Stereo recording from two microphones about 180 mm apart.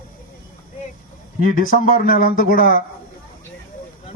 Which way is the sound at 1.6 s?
50° left (ahead or behind).